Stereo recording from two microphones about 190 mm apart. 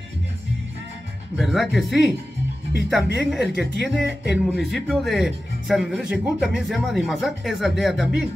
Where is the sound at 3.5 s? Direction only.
65° right (ahead or behind).